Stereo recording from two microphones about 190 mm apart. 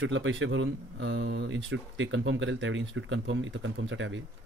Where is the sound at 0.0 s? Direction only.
80° right.